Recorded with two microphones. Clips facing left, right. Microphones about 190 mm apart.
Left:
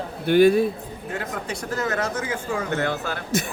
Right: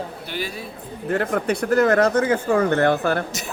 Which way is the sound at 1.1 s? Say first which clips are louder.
Right 9 dB; 60° right (ahead or behind).